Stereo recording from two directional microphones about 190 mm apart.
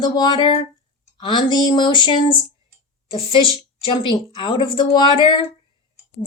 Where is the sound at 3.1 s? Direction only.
25° left (ahead or behind).